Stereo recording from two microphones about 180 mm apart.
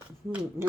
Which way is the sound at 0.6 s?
15° right (ahead or behind).